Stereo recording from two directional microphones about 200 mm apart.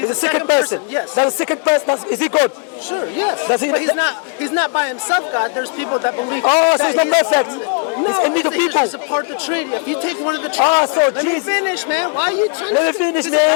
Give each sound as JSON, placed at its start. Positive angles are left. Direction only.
{"t": 0.1, "sound": "speech", "side_deg": 20}